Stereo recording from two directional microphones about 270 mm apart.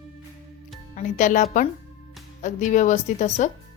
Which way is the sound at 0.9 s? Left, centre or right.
Left.